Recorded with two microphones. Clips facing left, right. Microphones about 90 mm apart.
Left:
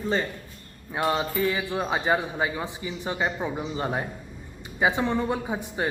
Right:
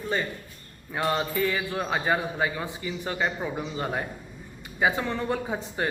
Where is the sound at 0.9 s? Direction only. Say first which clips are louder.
Left 1 dB; 15° left (ahead or behind).